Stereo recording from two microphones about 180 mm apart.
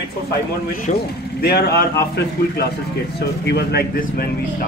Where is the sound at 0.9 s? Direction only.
45° left (ahead or behind).